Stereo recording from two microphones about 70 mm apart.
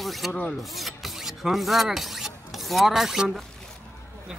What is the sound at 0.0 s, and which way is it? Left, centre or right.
Rub, centre.